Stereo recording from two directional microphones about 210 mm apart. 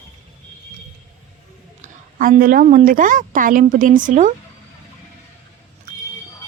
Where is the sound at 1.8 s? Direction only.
40° right (ahead or behind).